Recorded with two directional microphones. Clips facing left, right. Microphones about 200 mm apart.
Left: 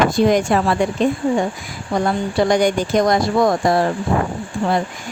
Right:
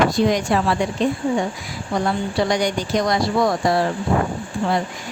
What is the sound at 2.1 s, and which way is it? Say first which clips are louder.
Speech: left 4 dB; 50° left (ahead or behind).